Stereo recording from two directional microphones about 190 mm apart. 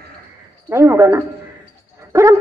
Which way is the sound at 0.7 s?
15° right (ahead or behind).